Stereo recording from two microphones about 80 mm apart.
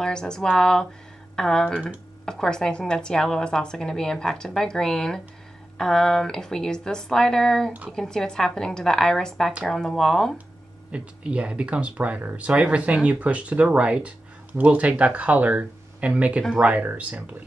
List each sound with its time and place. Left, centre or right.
0.0 s a woman's voice: centre
10.9 s speech: centre